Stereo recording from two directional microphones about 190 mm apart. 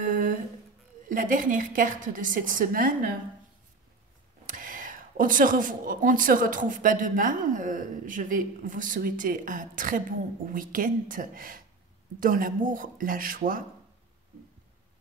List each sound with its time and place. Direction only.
0.0 s humming: 45° right (ahead or behind)
1.0 s speech: 45° right (ahead or behind)
4.5 s speech: 45° right (ahead or behind)